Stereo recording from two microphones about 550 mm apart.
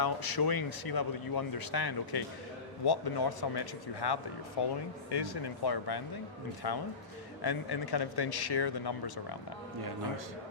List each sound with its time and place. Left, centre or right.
0.0 s speech: left